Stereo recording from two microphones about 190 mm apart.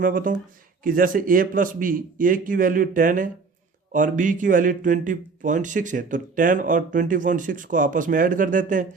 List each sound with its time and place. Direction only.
0.0 s a man's voice: 45° right (ahead or behind)